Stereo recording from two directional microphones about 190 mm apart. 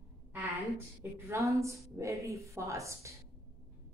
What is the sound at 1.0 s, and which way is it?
Speech, 15° right (ahead or behind).